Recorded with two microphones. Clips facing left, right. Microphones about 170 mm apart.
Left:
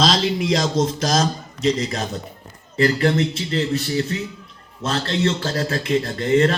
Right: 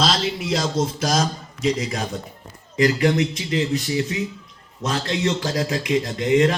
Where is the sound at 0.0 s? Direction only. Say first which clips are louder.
Left 3 dB; 5° right (ahead or behind).